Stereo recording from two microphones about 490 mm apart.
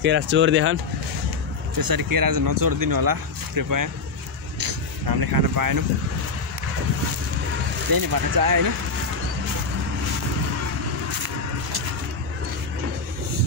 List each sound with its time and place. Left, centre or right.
0.0 s speech: right
1.8 s speech: right
7.9 s speech: right